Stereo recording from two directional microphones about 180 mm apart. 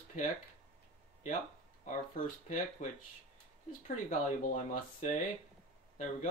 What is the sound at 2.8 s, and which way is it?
Speech, 45° left (ahead or behind).